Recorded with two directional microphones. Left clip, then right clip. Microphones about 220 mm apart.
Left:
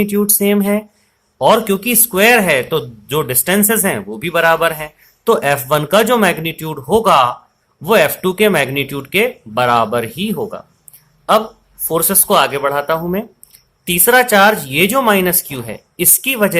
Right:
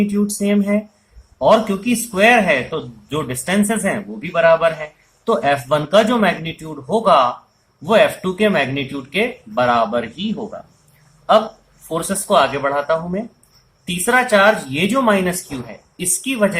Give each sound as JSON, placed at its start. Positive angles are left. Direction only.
{"t": 0.0, "sound": "speech", "side_deg": 45}
{"t": 11.9, "sound": "speech", "side_deg": 40}